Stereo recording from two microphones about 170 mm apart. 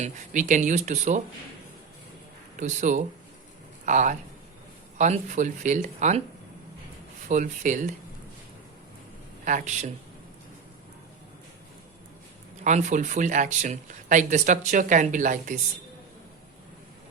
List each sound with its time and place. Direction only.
0.0 s speech: 50° right (ahead or behind)
2.6 s speech: 45° right (ahead or behind)
7.3 s speech: 45° right (ahead or behind)
9.4 s speech: 50° right (ahead or behind)
12.6 s speech: 45° right (ahead or behind)